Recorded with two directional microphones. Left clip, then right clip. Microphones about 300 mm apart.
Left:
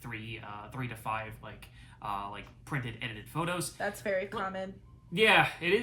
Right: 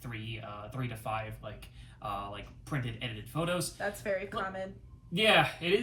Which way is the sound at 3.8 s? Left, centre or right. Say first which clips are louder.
Left 1 dB; left.